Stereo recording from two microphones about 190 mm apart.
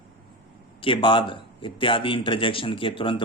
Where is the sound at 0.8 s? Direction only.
25° left (ahead or behind).